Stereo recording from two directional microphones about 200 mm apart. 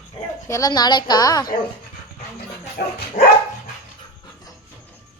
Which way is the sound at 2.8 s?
50° left (ahead or behind).